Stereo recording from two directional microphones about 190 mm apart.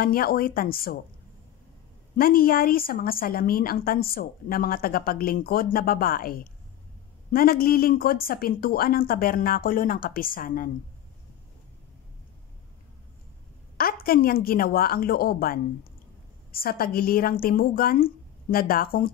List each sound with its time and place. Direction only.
0.0 s a woman's voice: 50° left (ahead or behind)
2.1 s a woman's voice: 50° left (ahead or behind)
14.0 s a woman's voice: 50° left (ahead or behind)